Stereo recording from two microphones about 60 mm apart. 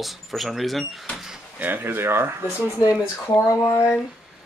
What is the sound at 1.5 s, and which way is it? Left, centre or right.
Speech, right.